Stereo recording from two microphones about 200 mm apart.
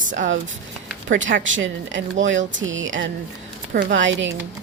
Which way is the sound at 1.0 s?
65° right (ahead or behind).